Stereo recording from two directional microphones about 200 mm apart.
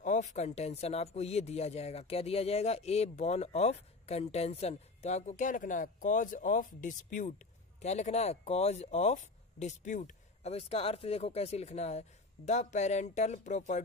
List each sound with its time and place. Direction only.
0.0 s speech: 40° left (ahead or behind)